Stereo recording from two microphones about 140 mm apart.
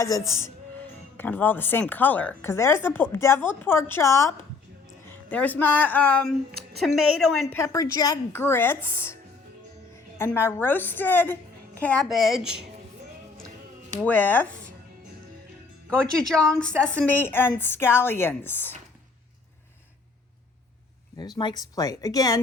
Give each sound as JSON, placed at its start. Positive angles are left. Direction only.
{"t": 0.0, "sound": "speech", "side_deg": 20}
{"t": 5.0, "sound": "speech", "side_deg": 10}
{"t": 6.7, "sound": "a woman's voice", "side_deg": 0}
{"t": 7.5, "sound": "speech", "side_deg": 20}
{"t": 8.3, "sound": "speech", "side_deg": 15}
{"t": 10.3, "sound": "a woman's voice", "side_deg": 15}
{"t": 12.0, "sound": "a woman's voice", "side_deg": 0}
{"t": 14.0, "sound": "speech", "side_deg": 10}
{"t": 15.9, "sound": "speech", "side_deg": 5}
{"t": 21.2, "sound": "speech", "side_deg": 30}